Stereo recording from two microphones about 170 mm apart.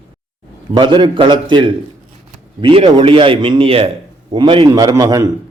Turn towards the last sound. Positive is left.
turn(degrees=-20)  # may be behind; listen again after turning